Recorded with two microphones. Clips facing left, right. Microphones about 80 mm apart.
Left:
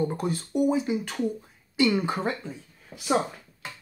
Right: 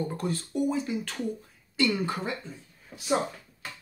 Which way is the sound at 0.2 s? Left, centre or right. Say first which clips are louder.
Left 3 dB; centre.